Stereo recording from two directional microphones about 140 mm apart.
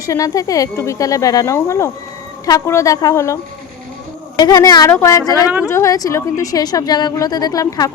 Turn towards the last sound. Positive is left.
turn(degrees=25)  # may be behind; listen again after turning